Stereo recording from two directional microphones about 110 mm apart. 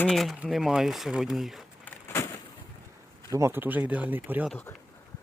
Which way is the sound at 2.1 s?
25° left (ahead or behind).